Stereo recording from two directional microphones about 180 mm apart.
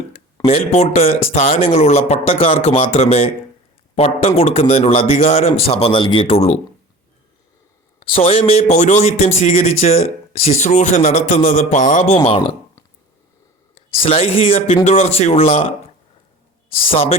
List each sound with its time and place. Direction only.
0.4 s a man's voice: 35° left (ahead or behind)
7.9 s a man's voice: 30° left (ahead or behind)
14.0 s a man's voice: 35° left (ahead or behind)
16.8 s a man's voice: 30° left (ahead or behind)